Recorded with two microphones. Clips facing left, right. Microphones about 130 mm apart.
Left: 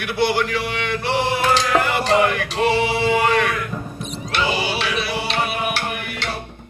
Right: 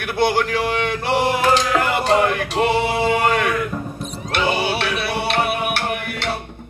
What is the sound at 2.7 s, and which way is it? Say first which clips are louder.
Music: left 2 dB; 50° right (ahead or behind).